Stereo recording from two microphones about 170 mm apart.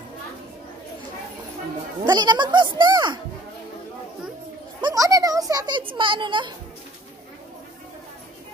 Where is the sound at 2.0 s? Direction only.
25° right (ahead or behind).